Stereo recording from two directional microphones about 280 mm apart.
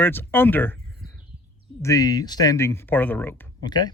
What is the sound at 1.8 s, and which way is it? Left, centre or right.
Speech, centre.